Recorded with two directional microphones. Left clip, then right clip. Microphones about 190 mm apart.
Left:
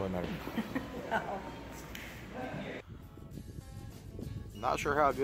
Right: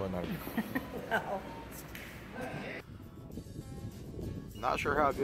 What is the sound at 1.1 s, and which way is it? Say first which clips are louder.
Speech: right 1 dB; 65° right (ahead or behind).